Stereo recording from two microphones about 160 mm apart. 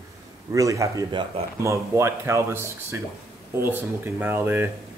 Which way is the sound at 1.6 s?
20° right (ahead or behind).